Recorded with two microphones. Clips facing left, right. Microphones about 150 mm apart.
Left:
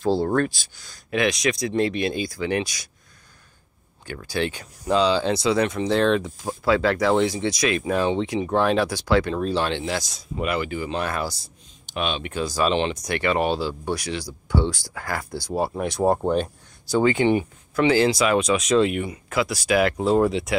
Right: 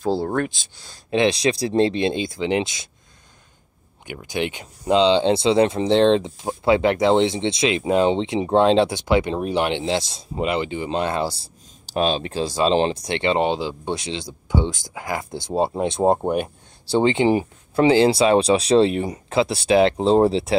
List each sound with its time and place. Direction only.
0.0 s speech: 10° right (ahead or behind)
0.5 s speech: 25° right (ahead or behind)
4.0 s speech: 20° right (ahead or behind)
16.8 s speech: 25° right (ahead or behind)